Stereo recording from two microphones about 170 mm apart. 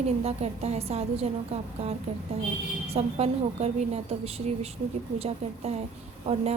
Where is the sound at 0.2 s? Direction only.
40° right (ahead or behind).